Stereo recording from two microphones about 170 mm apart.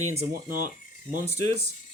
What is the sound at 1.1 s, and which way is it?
Speech, 40° right (ahead or behind).